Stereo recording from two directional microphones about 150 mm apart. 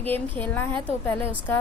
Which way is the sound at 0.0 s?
10° left (ahead or behind).